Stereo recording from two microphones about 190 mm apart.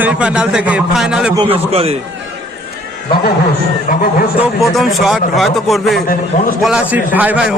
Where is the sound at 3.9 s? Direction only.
45° left (ahead or behind).